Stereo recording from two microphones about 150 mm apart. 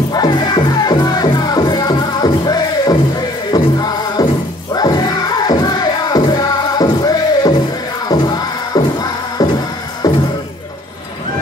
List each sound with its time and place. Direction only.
0.1 s music: 30° left (ahead or behind)